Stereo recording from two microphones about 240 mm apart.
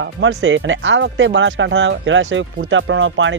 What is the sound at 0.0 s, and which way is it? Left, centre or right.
Speech, right.